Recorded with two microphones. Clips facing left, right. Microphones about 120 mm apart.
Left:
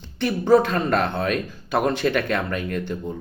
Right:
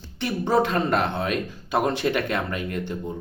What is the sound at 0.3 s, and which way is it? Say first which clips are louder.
Speech: left 5 dB; 25° right (ahead or behind).